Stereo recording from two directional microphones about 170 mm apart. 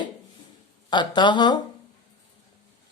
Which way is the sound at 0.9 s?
25° left (ahead or behind).